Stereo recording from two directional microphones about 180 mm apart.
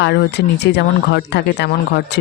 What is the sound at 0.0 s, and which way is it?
Speech, 70° left (ahead or behind).